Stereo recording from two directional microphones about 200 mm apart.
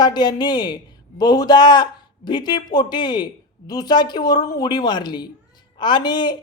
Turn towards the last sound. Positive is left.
turn(degrees=20)  # may be behind; listen again after turning